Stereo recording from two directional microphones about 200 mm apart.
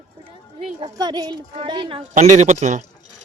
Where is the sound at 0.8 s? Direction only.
20° right (ahead or behind).